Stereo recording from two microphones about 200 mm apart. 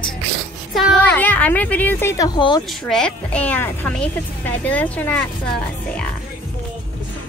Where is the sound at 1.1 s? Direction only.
10° left (ahead or behind).